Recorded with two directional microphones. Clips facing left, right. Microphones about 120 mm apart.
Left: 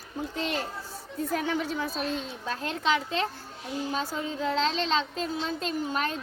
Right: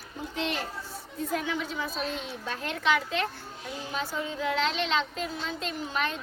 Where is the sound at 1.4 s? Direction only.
45° left (ahead or behind).